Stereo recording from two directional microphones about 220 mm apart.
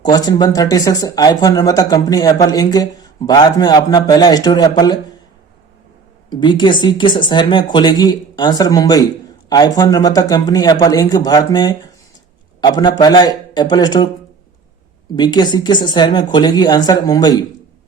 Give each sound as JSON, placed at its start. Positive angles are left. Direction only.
{"t": 0.0, "sound": "speech", "side_deg": 20}
{"t": 6.3, "sound": "speech", "side_deg": 20}
{"t": 15.1, "sound": "speech", "side_deg": 20}